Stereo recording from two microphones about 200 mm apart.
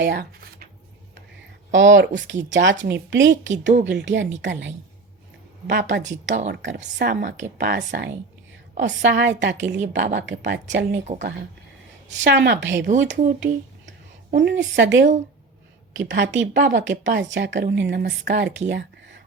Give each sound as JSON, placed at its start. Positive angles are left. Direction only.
{"t": 0.0, "sound": "a woman's voice", "side_deg": -55}
{"t": 1.7, "sound": "a woman's voice", "side_deg": -70}
{"t": 6.0, "sound": "a woman's voice", "side_deg": -40}
{"t": 6.5, "sound": "a woman's voice", "side_deg": -65}
{"t": 9.0, "sound": "a woman's voice", "side_deg": -65}
{"t": 9.7, "sound": "a woman's voice", "side_deg": -35}
{"t": 10.2, "sound": "a woman's voice", "side_deg": -65}
{"t": 12.2, "sound": "a woman's voice", "side_deg": -60}
{"t": 18.7, "sound": "a sound", "side_deg": -65}